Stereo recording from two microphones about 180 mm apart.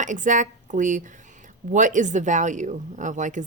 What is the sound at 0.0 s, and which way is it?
A woman's voice, 45° right (ahead or behind).